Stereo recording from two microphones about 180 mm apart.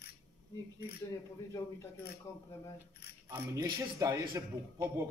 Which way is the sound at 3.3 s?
15° right (ahead or behind).